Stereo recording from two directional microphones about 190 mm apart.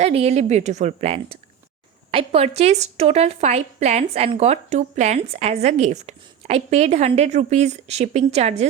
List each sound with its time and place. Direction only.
0.0 s a woman's voice: 35° right (ahead or behind)